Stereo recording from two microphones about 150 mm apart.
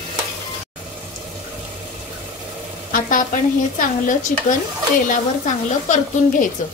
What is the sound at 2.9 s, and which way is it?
A woman's voice, 65° left (ahead or behind).